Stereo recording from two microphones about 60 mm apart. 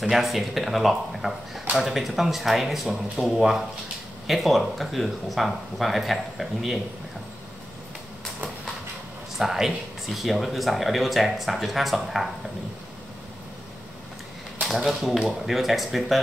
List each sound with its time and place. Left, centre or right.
0.1 s speech: centre
9.4 s speech: centre
14.7 s speech: centre